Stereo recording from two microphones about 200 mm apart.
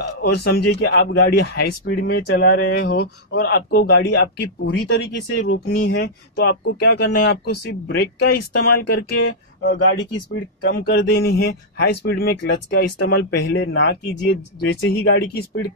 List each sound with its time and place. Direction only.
0.0 s a man's voice: 55° left (ahead or behind)